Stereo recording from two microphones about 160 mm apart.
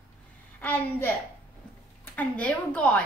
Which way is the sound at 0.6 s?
15° left (ahead or behind).